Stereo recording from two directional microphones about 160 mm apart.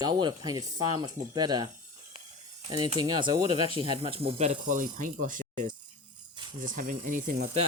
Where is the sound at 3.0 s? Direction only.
25° right (ahead or behind); by 7.5 s 60° right (ahead or behind).